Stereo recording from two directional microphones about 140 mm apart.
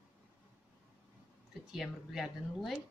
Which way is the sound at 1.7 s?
Centre (ahead or behind).